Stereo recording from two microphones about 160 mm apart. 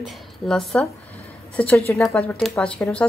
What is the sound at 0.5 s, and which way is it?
A woman's voice, 5° left (ahead or behind).